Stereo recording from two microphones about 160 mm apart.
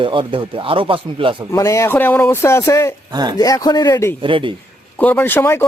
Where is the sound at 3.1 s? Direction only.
25° right (ahead or behind).